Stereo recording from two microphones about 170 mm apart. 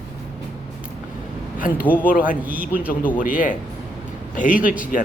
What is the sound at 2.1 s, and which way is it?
Speech, 55° left (ahead or behind).